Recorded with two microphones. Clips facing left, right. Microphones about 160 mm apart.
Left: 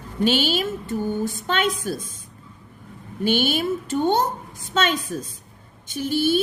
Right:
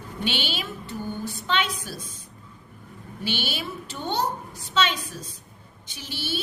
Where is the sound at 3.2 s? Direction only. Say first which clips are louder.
Left 10 dB; 50° left (ahead or behind).